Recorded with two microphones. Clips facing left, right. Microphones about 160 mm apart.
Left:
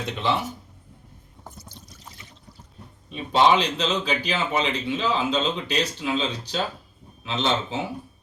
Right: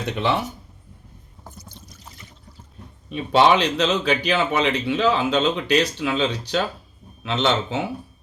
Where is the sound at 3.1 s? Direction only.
65° right (ahead or behind).